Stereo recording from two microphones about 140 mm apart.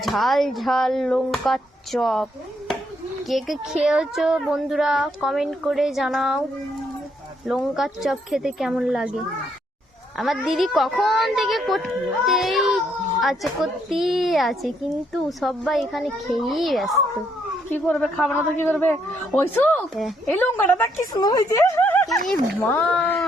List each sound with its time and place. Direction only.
0.0 s speech: centre (ahead or behind)
7.4 s speech: 5° right (ahead or behind); by 20.9 s 15° left (ahead or behind)
21.1 s a woman's voice: 25° left (ahead or behind); by 23.2 s 10° left (ahead or behind)